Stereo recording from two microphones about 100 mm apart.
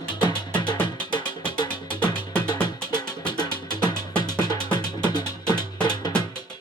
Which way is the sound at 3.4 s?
45° left (ahead or behind).